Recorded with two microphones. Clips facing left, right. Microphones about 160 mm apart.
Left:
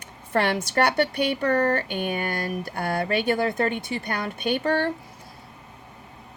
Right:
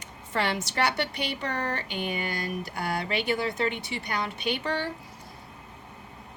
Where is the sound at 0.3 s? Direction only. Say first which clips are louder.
Left 5 dB; 50° left (ahead or behind).